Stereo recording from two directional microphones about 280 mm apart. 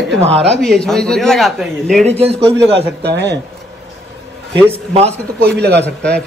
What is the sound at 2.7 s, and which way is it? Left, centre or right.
Speech, right.